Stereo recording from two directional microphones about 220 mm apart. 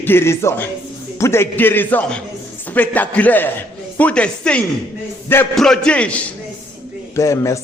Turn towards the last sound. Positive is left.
turn(degrees=15)  # may be behind; listen again after turning